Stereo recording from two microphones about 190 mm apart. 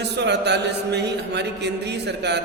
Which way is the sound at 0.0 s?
65° right (ahead or behind).